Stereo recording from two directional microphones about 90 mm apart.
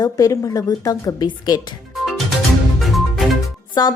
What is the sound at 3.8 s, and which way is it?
Speech, 45° left (ahead or behind).